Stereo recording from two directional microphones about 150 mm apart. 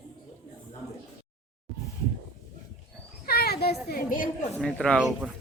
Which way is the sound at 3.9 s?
65° left (ahead or behind).